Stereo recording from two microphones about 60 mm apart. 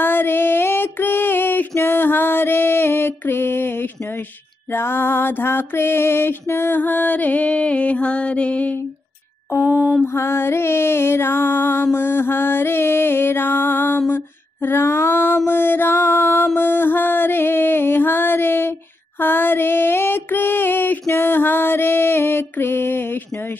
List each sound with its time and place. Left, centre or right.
0.0 s female singing: left
4.7 s mantra: left
10.1 s music: left